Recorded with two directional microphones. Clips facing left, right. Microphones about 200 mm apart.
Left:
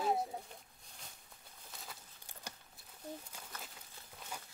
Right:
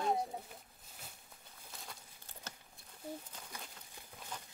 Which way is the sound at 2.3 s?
10° left (ahead or behind).